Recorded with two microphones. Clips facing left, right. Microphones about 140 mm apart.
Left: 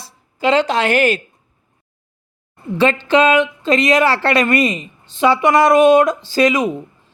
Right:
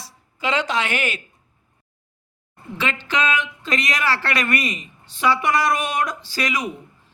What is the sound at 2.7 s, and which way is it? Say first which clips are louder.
Speech: left 11 dB; 35° left (ahead or behind).